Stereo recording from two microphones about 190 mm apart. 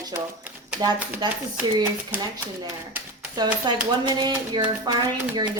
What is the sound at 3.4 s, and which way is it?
A woman's voice, 20° right (ahead or behind).